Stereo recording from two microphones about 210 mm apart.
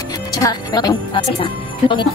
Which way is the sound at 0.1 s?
20° left (ahead or behind).